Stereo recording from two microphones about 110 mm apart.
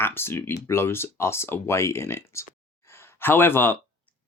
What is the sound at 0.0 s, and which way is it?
Speech, 20° left (ahead or behind).